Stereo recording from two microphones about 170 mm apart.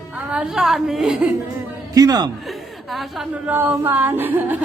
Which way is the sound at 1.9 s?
20° right (ahead or behind).